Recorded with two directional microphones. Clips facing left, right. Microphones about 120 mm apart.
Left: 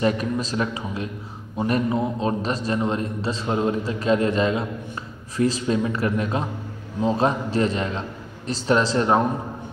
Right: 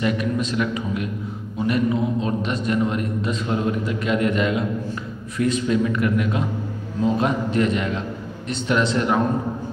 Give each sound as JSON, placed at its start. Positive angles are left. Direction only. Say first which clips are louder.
{"t": 0.0, "sound": "a man's voice", "louder": "even", "side_deg": 35}